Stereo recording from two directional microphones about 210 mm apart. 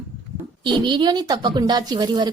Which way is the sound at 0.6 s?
20° right (ahead or behind).